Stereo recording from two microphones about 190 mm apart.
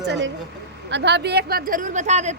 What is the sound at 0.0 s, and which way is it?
A woman's voice, 65° right (ahead or behind).